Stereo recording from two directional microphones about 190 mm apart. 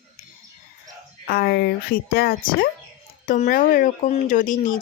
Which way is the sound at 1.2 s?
55° left (ahead or behind).